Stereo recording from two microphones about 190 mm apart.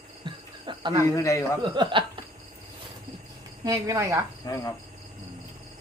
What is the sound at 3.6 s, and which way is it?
Chopping, 15° right (ahead or behind).